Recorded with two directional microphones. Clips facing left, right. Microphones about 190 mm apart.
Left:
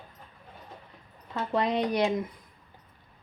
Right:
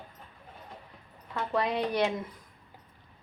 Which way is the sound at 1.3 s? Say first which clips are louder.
Left 2 dB; 20° left (ahead or behind).